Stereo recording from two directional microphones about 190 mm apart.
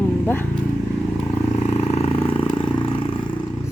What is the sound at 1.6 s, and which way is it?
Vehicle, 35° left (ahead or behind).